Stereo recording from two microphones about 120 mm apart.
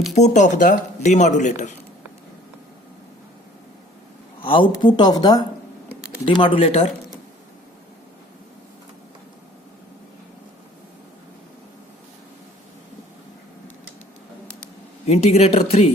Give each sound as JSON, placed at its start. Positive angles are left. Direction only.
{"t": 0.1, "sound": "speech", "side_deg": 85}
{"t": 4.4, "sound": "speech", "side_deg": 45}
{"t": 15.0, "sound": "speech", "side_deg": 60}